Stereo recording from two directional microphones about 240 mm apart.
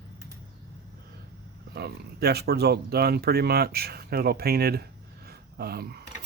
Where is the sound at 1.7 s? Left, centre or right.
Right.